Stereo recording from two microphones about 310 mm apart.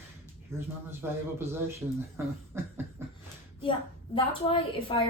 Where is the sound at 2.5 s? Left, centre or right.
Centre.